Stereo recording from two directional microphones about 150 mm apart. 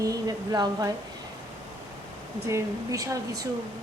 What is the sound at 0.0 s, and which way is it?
Speech, 25° right (ahead or behind).